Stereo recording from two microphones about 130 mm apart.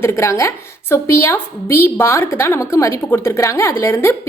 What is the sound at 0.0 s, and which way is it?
A woman's voice, 20° left (ahead or behind).